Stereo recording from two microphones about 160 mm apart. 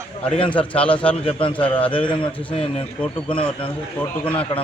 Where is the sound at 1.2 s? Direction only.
35° left (ahead or behind).